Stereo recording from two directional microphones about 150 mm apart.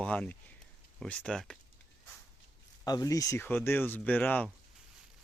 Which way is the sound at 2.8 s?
25° left (ahead or behind).